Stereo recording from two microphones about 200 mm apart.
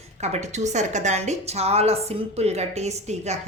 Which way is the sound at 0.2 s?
35° right (ahead or behind).